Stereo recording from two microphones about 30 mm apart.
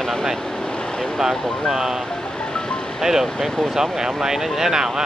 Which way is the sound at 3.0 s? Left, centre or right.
Centre.